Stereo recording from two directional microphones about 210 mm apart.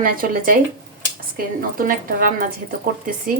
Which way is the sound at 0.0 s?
40° right (ahead or behind).